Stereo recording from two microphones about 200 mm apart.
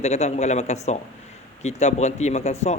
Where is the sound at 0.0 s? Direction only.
35° left (ahead or behind).